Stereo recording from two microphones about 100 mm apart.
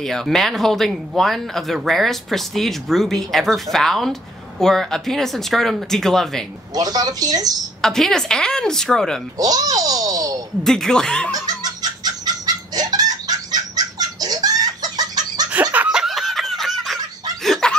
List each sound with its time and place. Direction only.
0.0 s speech: 5° left (ahead or behind)
6.7 s speech: 40° right (ahead or behind)
7.8 s speech: 5° left (ahead or behind)
9.4 s a sound: 40° right (ahead or behind)
10.6 s speech: 5° left (ahead or behind)
11.3 s fowl: 40° right (ahead or behind)
15.7 s snicker: 10° right (ahead or behind); by 17.7 s 5° left (ahead or behind)